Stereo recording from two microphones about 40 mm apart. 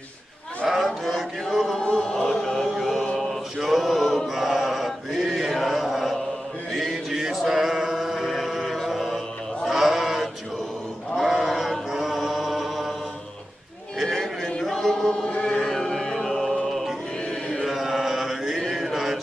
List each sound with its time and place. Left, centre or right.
0.7 s a sound: centre
1.8 s a sound: left
2.2 s chant: centre
2.7 s music: centre
3.5 s male singing: centre
4.3 s chant: centre
6.7 s mantra: centre
7.3 s male singing: centre
9.1 s mantra: centre
11.1 s chant: centre
14.1 s a sound: centre
14.6 s chant: centre
15.6 s music: centre
17.6 s chant: centre